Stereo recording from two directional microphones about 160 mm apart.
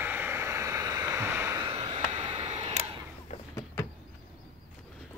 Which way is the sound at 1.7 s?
35° right (ahead or behind).